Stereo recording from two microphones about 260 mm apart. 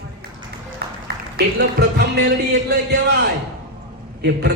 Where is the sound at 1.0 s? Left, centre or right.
Right.